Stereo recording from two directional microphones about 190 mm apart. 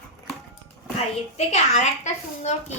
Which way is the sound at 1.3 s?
35° left (ahead or behind).